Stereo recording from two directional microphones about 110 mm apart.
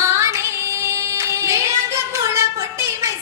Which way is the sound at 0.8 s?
25° right (ahead or behind).